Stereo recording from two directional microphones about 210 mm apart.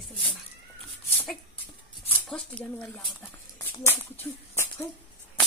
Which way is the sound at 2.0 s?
5° left (ahead or behind).